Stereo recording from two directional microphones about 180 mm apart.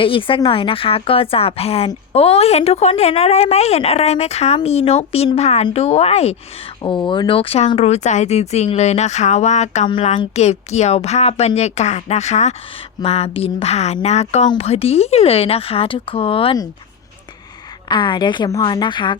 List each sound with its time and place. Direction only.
0.0 s a woman's voice: 30° left (ahead or behind)
17.8 s a woman's voice: 25° left (ahead or behind)